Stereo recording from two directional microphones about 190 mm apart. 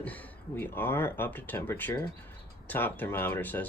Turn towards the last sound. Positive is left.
turn(degrees=10)  # may be behind; listen again after turning